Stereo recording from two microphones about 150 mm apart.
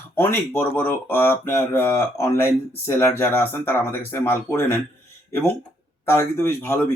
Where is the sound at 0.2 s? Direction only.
15° left (ahead or behind).